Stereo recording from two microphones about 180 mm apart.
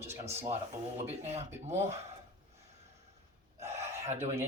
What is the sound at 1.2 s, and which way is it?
Speech, 35° right (ahead or behind).